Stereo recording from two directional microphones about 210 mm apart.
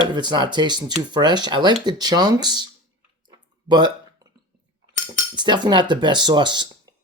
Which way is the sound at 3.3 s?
20° right (ahead or behind).